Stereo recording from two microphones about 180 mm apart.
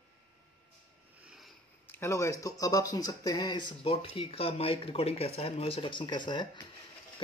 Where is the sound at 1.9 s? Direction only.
15° left (ahead or behind).